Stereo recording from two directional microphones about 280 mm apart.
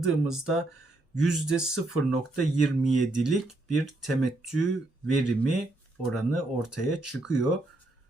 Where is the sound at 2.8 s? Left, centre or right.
Left.